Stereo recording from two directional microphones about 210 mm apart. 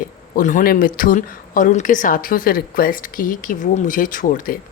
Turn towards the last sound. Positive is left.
turn(degrees=40)  # may be behind; listen again after turning